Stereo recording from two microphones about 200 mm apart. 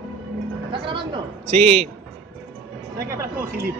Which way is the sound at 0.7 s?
25° right (ahead or behind).